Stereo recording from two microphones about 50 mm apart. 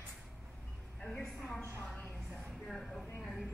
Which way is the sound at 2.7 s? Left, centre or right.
Centre.